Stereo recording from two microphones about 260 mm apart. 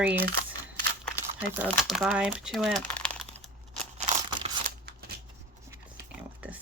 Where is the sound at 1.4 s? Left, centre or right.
Centre.